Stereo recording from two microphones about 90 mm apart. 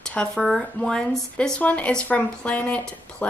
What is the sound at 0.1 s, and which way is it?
Speech, 10° left (ahead or behind).